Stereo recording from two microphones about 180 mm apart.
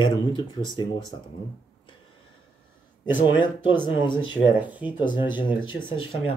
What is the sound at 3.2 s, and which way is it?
Speech, 25° left (ahead or behind).